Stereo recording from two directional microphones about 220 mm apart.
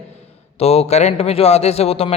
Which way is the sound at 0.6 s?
30° left (ahead or behind).